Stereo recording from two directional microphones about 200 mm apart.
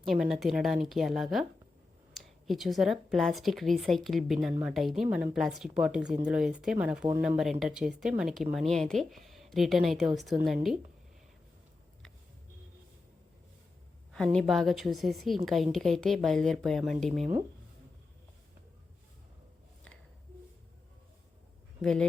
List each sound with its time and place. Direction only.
0.0 s speech: centre (ahead or behind)
14.1 s speech: 5° left (ahead or behind)
17.1 s speech: 35° right (ahead or behind)
21.8 s speech: centre (ahead or behind)